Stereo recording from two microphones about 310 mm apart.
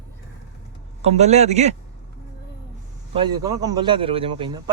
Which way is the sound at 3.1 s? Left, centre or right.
Centre.